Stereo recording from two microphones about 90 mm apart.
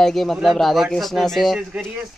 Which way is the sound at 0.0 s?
Centre (ahead or behind).